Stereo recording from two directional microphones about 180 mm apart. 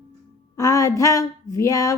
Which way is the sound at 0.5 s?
20° left (ahead or behind).